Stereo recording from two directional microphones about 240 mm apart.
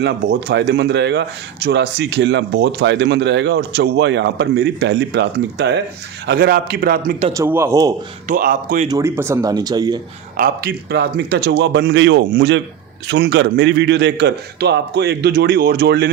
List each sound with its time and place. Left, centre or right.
0.0 s speech: right
7.3 s speech: centre
8.3 s speech: right
8.9 s speech: centre
10.3 s speech: right